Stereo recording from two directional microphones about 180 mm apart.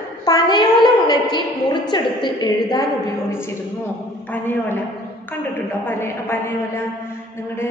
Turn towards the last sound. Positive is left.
turn(degrees=15)  # may be behind; listen again after turning